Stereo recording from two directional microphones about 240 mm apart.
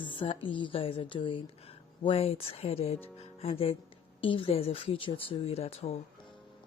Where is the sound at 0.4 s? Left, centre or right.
Left.